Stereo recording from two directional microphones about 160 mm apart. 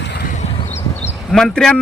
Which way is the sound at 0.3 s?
45° left (ahead or behind).